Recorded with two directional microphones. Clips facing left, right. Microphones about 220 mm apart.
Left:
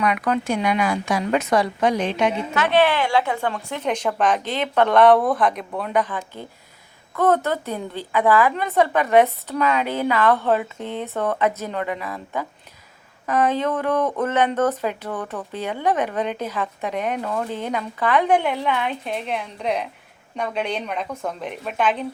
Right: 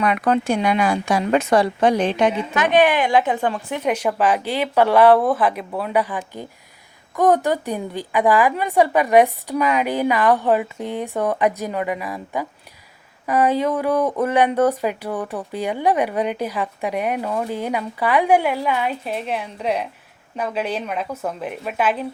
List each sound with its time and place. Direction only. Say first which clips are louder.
0.0 s a woman's voice: right 3 dB; 30° right (ahead or behind)
2.6 s a woman's voice: right 2 dB; 15° right (ahead or behind)